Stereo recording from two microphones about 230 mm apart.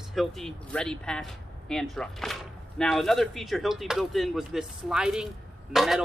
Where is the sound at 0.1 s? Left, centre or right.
Centre.